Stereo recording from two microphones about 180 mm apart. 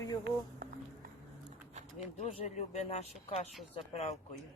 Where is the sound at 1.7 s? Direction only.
40° right (ahead or behind).